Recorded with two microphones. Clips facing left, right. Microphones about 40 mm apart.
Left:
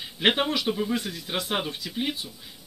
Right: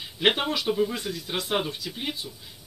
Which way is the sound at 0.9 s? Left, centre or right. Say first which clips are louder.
Left 2 dB; left.